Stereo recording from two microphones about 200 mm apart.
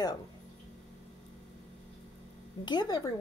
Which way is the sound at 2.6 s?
20° left (ahead or behind).